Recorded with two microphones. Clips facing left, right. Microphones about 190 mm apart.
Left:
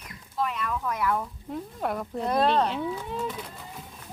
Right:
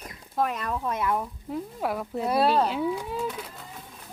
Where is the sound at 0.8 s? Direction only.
25° right (ahead or behind).